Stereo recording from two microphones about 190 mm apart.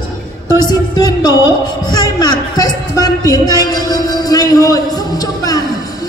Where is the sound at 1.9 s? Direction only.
20° left (ahead or behind).